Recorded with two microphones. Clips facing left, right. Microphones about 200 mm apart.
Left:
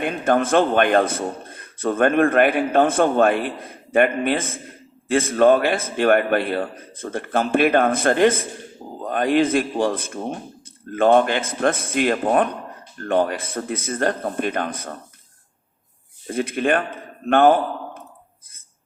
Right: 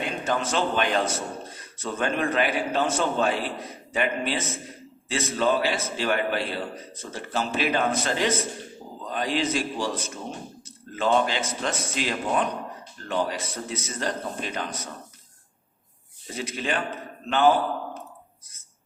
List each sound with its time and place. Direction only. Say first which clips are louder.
0.0 s a man's voice: left 8 dB; 55° left (ahead or behind)
16.2 s a man's voice: left 9 dB; 55° left (ahead or behind)